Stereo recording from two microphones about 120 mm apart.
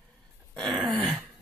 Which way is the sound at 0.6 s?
Centre (ahead or behind).